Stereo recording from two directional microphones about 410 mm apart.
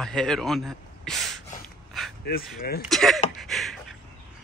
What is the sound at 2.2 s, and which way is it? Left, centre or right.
Speech, left.